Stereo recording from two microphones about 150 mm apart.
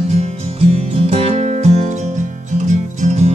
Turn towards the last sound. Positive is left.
turn(degrees=-50)  # may be behind; listen again after turning